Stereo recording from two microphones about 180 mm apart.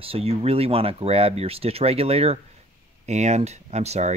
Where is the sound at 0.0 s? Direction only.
30° right (ahead or behind).